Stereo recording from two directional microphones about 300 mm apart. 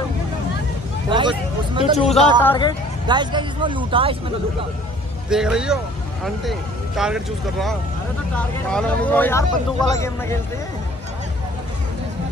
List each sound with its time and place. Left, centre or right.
1.8 s speech: left
3.1 s speech: centre
5.3 s speech: centre
7.0 s speech: centre
8.7 s speech: centre